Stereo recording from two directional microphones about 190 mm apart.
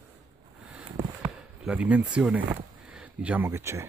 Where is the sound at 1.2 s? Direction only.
5° right (ahead or behind).